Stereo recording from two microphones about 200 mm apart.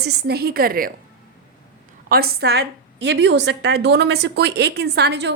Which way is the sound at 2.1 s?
50° right (ahead or behind).